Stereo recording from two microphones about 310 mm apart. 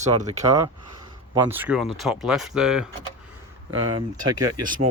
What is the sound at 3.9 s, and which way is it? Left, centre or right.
Speech, centre.